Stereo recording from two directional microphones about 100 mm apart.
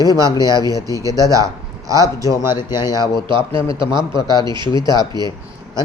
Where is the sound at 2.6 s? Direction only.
45° left (ahead or behind).